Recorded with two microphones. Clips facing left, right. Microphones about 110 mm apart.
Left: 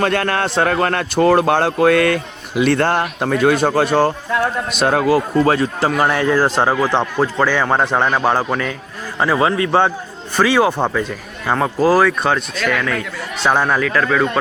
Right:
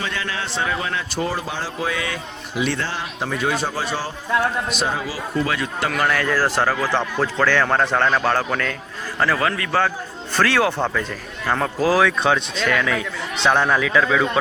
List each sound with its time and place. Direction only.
0.0 s a man's voice: 60° left (ahead or behind); by 5.9 s 35° left (ahead or behind)
5.9 s a man's voice: 25° left (ahead or behind)
10.3 s a man's voice: 15° left (ahead or behind); by 13.1 s 5° right (ahead or behind)
13.3 s a man's voice: 10° left (ahead or behind)